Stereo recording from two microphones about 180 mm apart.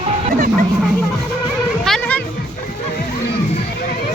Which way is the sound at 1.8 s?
5° left (ahead or behind).